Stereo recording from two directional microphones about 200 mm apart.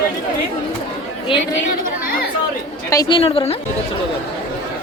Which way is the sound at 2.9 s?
20° left (ahead or behind).